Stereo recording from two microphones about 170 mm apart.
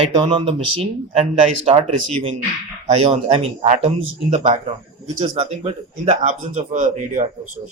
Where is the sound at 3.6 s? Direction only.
35° right (ahead or behind).